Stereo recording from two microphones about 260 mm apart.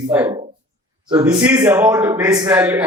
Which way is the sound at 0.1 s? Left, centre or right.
Centre.